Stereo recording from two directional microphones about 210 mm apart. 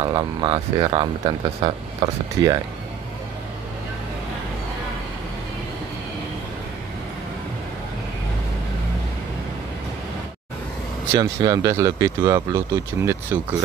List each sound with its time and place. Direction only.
0.0 s speech: 20° right (ahead or behind)
11.1 s speech: 15° right (ahead or behind)